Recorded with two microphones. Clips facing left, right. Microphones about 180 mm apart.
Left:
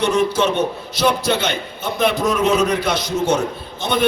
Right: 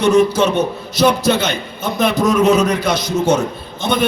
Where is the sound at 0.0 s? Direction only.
45° right (ahead or behind).